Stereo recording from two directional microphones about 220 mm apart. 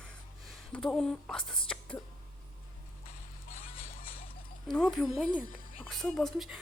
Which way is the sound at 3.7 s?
25° left (ahead or behind).